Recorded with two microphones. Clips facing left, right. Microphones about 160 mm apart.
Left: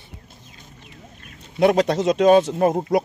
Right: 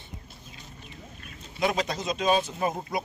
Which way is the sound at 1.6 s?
70° left (ahead or behind).